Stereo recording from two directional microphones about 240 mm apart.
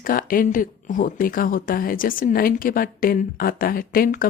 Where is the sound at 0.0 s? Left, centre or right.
Left.